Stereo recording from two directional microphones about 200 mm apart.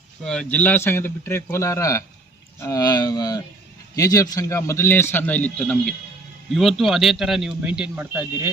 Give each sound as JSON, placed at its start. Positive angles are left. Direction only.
{"t": 0.3, "sound": "a man's voice", "side_deg": 5}